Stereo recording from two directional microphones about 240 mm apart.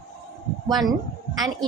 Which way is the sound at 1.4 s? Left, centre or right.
Centre.